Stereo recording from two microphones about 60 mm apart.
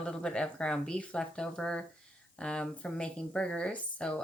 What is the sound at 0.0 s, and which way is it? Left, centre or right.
Speech, centre.